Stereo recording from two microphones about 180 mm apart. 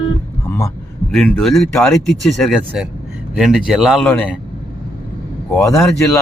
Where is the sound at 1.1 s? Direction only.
Centre (ahead or behind).